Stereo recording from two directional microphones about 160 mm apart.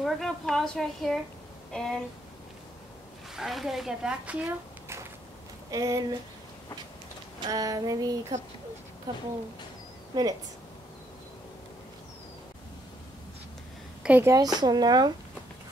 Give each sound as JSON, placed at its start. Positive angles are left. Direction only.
{"t": 0.0, "sound": "speech", "side_deg": 0}
{"t": 3.3, "sound": "speech", "side_deg": 0}
{"t": 7.3, "sound": "speech", "side_deg": -25}
{"t": 14.0, "sound": "a woman's voice", "side_deg": -10}
{"t": 14.3, "sound": "speech", "side_deg": -25}